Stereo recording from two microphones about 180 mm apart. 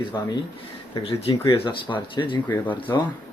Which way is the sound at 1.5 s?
25° left (ahead or behind).